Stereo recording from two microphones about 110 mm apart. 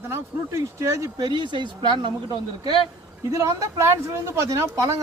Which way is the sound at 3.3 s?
30° right (ahead or behind).